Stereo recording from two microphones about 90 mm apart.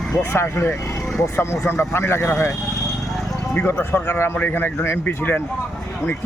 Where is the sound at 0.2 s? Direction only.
25° left (ahead or behind).